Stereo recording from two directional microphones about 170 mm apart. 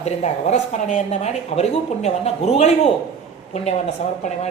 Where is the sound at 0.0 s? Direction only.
40° left (ahead or behind).